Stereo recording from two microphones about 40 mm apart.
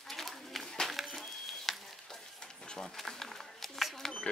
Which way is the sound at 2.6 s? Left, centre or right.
Centre.